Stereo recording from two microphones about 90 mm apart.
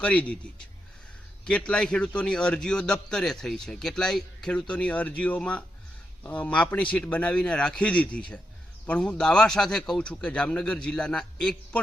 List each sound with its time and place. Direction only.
0.0 s a man's voice: 15° left (ahead or behind)
1.5 s a man's voice: 10° left (ahead or behind)